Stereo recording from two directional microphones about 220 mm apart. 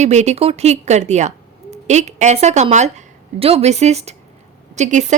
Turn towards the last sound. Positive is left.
turn(degrees=-35)  # may be behind; listen again after turning